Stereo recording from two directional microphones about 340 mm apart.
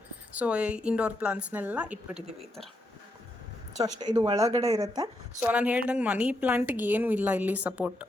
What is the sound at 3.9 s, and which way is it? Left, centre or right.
A woman's voice, centre.